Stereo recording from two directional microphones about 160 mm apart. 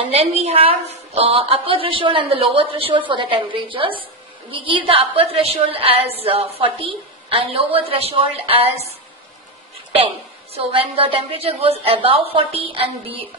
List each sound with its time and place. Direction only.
0.1 s a woman's voice: 40° right (ahead or behind)
9.9 s a woman's voice: 35° right (ahead or behind)